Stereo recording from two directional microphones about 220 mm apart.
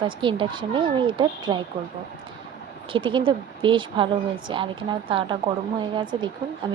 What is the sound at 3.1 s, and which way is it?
A woman's voice, 20° right (ahead or behind).